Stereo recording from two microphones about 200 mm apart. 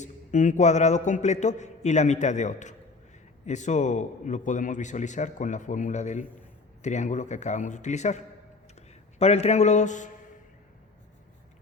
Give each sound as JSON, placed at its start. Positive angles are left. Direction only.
{"t": 0.0, "sound": "a man's voice", "side_deg": 40}